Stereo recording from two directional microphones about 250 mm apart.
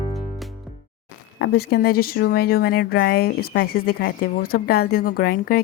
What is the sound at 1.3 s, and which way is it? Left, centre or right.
Speech, left.